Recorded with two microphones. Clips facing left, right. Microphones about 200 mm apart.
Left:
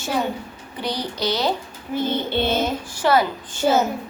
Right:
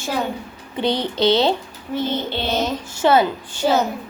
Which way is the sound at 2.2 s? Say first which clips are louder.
Left 2 dB; 50° left (ahead or behind).